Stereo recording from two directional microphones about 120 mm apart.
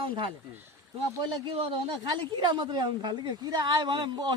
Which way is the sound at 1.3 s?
50° right (ahead or behind).